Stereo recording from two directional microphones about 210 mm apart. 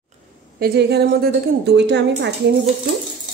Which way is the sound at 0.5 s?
50° right (ahead or behind).